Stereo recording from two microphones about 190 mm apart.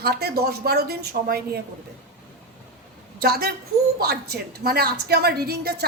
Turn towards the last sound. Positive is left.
turn(degrees=-55)  # may be behind; listen again after turning